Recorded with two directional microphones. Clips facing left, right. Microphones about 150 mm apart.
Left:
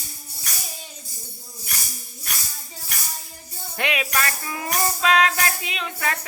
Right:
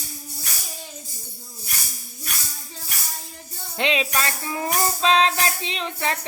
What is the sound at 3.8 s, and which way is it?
Music, 25° right (ahead or behind).